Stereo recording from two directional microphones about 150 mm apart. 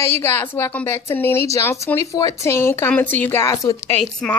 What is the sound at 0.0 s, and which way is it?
A woman's voice, 15° left (ahead or behind).